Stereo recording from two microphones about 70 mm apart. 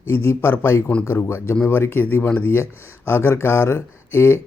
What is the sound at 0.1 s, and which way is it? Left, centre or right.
Speech, left.